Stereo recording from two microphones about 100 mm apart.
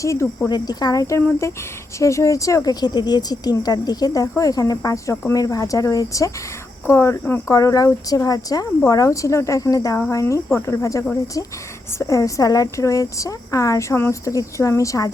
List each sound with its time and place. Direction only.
0.0 s speech: 30° left (ahead or behind)
0.5 s speech: 40° left (ahead or behind); by 7.5 s 25° left (ahead or behind)
7.5 s speech: 35° left (ahead or behind)